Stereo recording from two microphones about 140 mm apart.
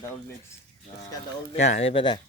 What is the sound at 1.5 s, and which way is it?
Speech, 55° left (ahead or behind).